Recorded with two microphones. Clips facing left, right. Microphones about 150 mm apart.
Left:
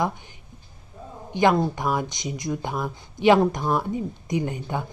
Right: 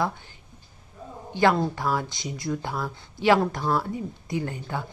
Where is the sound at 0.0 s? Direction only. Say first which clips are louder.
Left 2 dB; 15° left (ahead or behind).